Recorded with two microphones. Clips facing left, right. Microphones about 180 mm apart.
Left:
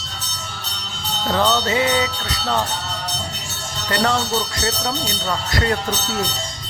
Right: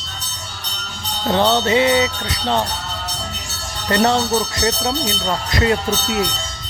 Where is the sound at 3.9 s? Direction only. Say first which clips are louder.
Right 4 dB; 25° right (ahead or behind).